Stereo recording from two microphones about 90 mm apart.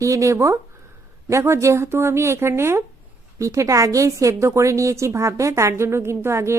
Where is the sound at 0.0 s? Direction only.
35° right (ahead or behind).